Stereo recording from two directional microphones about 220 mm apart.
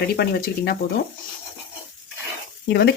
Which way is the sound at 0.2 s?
45° left (ahead or behind).